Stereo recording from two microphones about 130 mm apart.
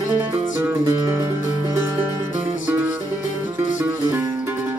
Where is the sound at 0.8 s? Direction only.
25° right (ahead or behind).